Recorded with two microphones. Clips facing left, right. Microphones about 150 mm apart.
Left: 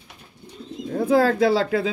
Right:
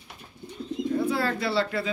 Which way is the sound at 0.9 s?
90° left.